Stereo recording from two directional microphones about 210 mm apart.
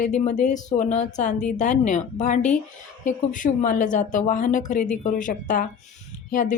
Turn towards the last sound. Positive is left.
turn(degrees=40)  # may be behind; listen again after turning